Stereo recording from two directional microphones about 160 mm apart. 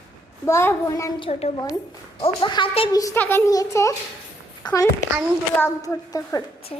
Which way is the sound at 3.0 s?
15° left (ahead or behind).